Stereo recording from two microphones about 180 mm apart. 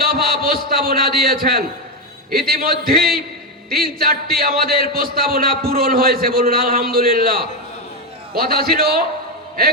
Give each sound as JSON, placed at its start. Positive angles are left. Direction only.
{"t": 0.0, "sound": "a man's voice", "side_deg": -55}